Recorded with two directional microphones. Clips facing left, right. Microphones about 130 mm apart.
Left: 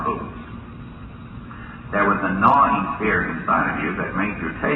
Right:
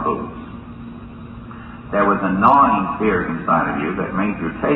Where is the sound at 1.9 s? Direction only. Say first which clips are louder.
Right 4 dB; 25° right (ahead or behind).